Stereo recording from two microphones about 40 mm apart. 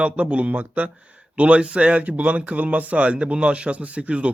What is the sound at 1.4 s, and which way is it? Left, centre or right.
Speech, right.